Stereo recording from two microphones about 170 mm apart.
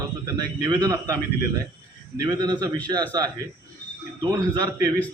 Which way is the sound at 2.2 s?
25° right (ahead or behind).